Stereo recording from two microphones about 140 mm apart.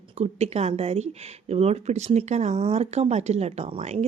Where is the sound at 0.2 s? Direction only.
50° right (ahead or behind).